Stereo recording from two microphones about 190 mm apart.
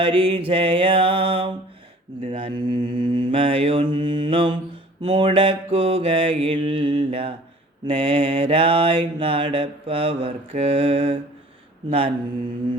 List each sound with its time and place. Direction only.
0.0 s mantra: 30° right (ahead or behind)